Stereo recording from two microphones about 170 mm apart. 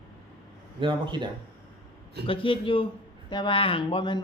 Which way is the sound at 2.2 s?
30° left (ahead or behind).